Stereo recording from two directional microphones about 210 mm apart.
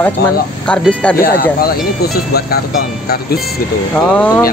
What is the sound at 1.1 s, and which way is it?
Speech, 45° left (ahead or behind).